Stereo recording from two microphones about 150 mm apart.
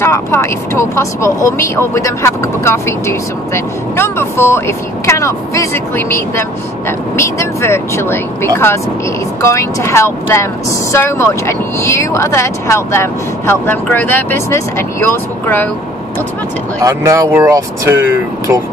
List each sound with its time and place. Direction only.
0.0 s speech: 15° left (ahead or behind)
16.8 s speech: 20° right (ahead or behind)